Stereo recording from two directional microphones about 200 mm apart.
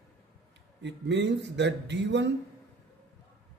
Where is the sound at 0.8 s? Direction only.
60° right (ahead or behind).